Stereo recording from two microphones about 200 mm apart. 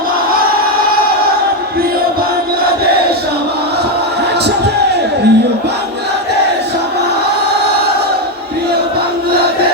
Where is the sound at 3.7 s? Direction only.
55° right (ahead or behind).